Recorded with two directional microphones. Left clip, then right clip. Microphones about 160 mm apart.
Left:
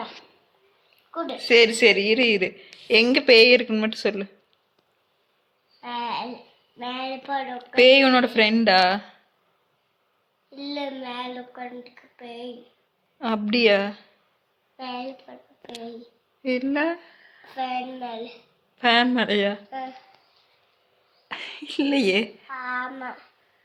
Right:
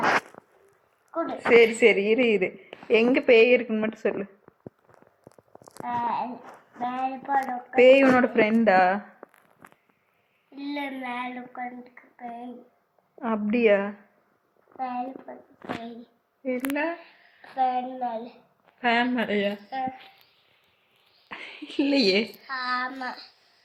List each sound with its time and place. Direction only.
1.1 s a sound: centre (ahead or behind)
1.5 s a woman's voice: 25° left (ahead or behind)
5.8 s a sound: centre (ahead or behind)
6.8 s a woman's voice: centre (ahead or behind)
7.8 s a woman's voice: 25° left (ahead or behind)
10.7 s a woman's voice: 5° right (ahead or behind)
13.1 s a woman's voice: 25° left (ahead or behind)
16.4 s a woman's voice: 45° left (ahead or behind)
17.4 s a child's voice: 15° right (ahead or behind)
18.8 s a woman's voice: 45° left (ahead or behind)
21.2 s a woman's voice: centre (ahead or behind)